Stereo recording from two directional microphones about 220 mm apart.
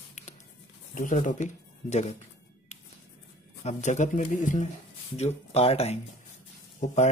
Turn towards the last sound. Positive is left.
turn(degrees=30)  # may be behind; listen again after turning